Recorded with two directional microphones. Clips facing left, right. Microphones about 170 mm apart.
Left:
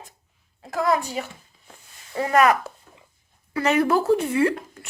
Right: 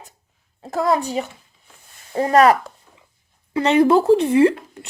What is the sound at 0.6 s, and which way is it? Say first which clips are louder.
Speech: right 3 dB; 30° right (ahead or behind).